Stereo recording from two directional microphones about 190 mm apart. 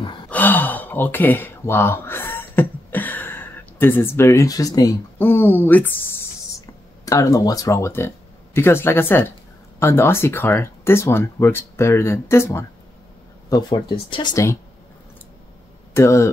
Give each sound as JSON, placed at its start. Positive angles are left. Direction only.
{"t": 0.3, "sound": "speech", "side_deg": 10}
{"t": 15.9, "sound": "speech", "side_deg": 15}